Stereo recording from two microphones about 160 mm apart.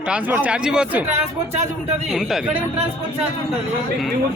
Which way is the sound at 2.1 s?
Centre (ahead or behind).